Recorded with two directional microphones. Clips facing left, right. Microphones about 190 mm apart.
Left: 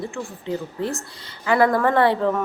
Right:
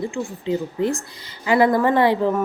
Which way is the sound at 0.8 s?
15° right (ahead or behind).